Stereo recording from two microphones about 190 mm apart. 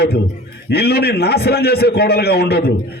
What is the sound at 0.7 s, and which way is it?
A man's voice, 60° left (ahead or behind).